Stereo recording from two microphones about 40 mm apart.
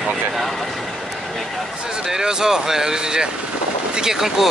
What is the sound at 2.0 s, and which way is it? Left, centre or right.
Speech, centre.